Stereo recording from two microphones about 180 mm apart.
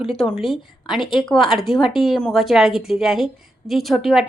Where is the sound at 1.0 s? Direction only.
25° left (ahead or behind).